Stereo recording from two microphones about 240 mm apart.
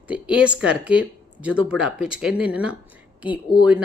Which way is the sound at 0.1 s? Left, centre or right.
Centre.